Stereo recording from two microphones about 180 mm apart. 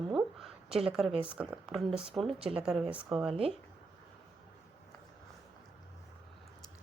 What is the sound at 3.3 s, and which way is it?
Speech, 30° right (ahead or behind).